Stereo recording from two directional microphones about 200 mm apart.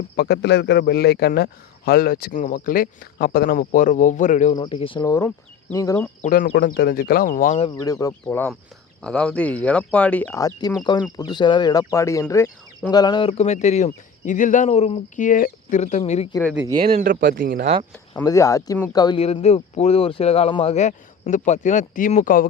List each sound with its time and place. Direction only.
0.2 s a man's voice: 55° left (ahead or behind); by 4.5 s 40° left (ahead or behind)
4.5 s speech: 25° left (ahead or behind)
6.2 s a man's voice: 45° left (ahead or behind)
7.5 s speech: 25° left (ahead or behind)
16.9 s speech: 40° right (ahead or behind)
17.9 s speech: 10° left (ahead or behind); by 22.4 s 45° left (ahead or behind)